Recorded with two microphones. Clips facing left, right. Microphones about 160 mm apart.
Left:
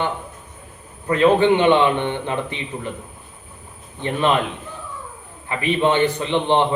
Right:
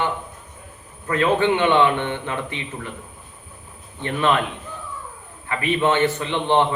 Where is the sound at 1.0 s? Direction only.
20° left (ahead or behind).